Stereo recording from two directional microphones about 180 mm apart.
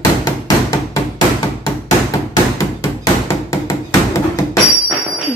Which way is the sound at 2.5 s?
20° left (ahead or behind).